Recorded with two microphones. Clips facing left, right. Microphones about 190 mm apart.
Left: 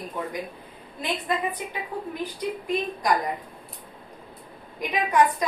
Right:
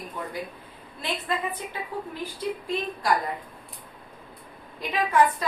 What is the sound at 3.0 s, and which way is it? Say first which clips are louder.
Speech: left 1 dB; 15° left (ahead or behind).